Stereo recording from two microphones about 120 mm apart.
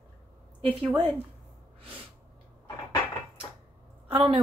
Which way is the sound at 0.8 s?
40° right (ahead or behind).